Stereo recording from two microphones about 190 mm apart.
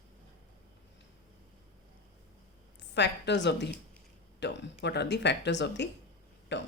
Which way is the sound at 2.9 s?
65° left (ahead or behind).